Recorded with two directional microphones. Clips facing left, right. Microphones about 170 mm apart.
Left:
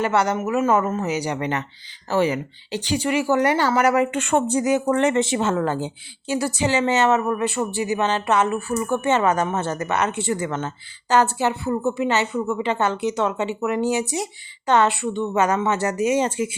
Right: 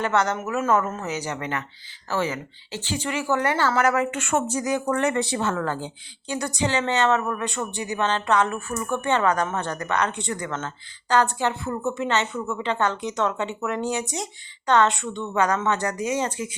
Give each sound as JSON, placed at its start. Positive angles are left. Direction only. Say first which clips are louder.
{"t": 0.0, "sound": "speech", "louder": "left 3 dB", "side_deg": 10}
{"t": 4.3, "sound": "speech", "louder": "left 5 dB", "side_deg": 30}
{"t": 6.7, "sound": "speech", "louder": "left 3 dB", "side_deg": 10}
{"t": 9.0, "sound": "speech", "louder": "left 2 dB", "side_deg": 20}
{"t": 9.3, "sound": "speech", "louder": "left 3 dB", "side_deg": 10}